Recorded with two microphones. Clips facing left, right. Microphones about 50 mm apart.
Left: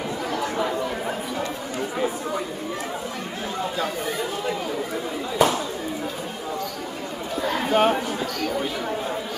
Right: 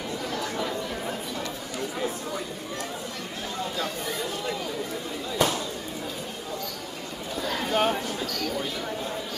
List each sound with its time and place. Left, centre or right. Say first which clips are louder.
0.3 s chatter: left 6 dB; left
3.7 s chatter: left 4 dB; centre
5.4 s a sound: left 5 dB; centre
7.4 s basketball bounce: left 5 dB; centre